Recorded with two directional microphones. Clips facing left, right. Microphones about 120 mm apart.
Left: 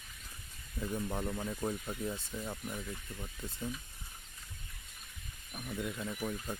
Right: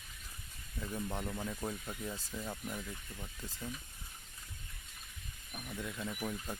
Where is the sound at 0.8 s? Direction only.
Centre (ahead or behind).